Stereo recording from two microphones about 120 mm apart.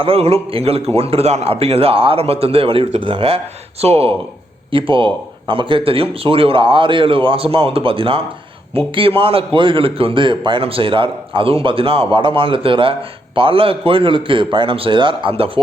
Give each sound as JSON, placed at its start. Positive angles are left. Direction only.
{"t": 0.0, "sound": "a man's voice", "side_deg": -55}
{"t": 4.7, "sound": "a man's voice", "side_deg": -45}